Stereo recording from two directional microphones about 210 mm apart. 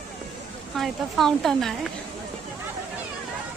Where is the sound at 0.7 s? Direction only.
Centre (ahead or behind).